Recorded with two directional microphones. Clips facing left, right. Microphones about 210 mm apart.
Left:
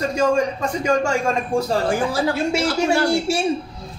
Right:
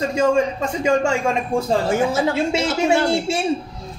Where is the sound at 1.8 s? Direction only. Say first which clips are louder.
Right 1 dB; 25° right (ahead or behind).